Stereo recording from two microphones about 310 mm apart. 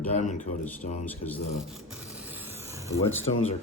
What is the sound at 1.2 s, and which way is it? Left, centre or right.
Speech, centre.